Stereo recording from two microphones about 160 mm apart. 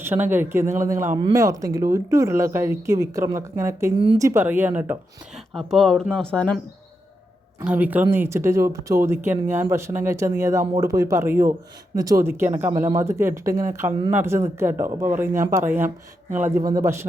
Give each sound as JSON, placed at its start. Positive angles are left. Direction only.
{"t": 0.0, "sound": "speech", "side_deg": -15}
{"t": 3.9, "sound": "speech", "side_deg": -35}
{"t": 4.2, "sound": "speech", "side_deg": -15}
{"t": 5.5, "sound": "speech", "side_deg": 0}
{"t": 7.6, "sound": "speech", "side_deg": -10}